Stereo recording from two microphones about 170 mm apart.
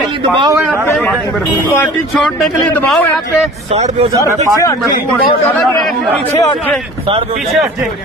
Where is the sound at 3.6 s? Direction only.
40° right (ahead or behind).